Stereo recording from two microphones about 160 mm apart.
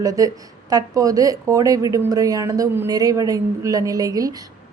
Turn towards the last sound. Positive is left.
turn(degrees=-20)  # may be behind; listen again after turning